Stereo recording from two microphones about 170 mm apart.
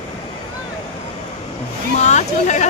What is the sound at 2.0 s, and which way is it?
Speech, 45° left (ahead or behind).